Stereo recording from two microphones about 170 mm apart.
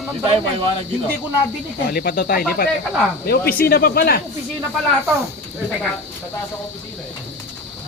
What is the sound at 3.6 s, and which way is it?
Speech, 65° left (ahead or behind).